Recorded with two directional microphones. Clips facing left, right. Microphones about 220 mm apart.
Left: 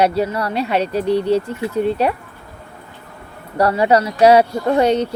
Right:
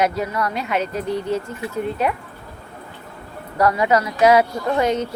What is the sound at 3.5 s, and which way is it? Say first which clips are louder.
Speech: left 3 dB; 30° left (ahead or behind).